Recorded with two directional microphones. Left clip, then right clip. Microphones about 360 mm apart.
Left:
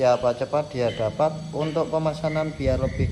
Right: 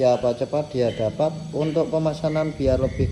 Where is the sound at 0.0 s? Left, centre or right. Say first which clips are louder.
Right 1 dB; centre.